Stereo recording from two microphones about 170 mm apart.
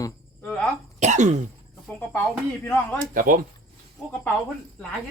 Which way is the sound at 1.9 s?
10° left (ahead or behind).